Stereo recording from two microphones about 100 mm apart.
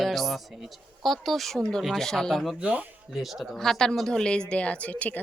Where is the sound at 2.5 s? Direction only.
15° right (ahead or behind).